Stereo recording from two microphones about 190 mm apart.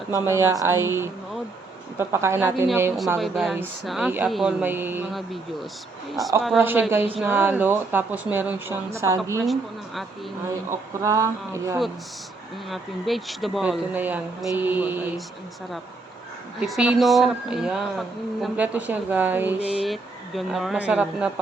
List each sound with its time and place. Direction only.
0.1 s a woman's voice: 15° right (ahead or behind)
3.2 s speech: centre (ahead or behind)
5.1 s speech: centre (ahead or behind)
6.6 s a woman's voice: 10° right (ahead or behind)
9.4 s speech: centre (ahead or behind)
10.5 s a woman's voice: 15° right (ahead or behind)
12.6 s speech: centre (ahead or behind)
16.6 s speech: 5° right (ahead or behind)
19.5 s a sound: 30° left (ahead or behind)
19.8 s speech: centre (ahead or behind)